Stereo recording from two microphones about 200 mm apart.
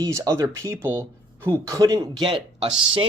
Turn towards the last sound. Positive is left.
turn(degrees=-25)  # may be behind; listen again after turning